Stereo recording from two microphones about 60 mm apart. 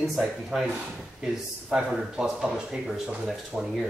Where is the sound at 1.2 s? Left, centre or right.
Centre.